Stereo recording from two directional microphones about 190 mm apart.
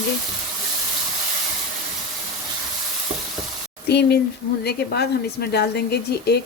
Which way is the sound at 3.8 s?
60° left (ahead or behind).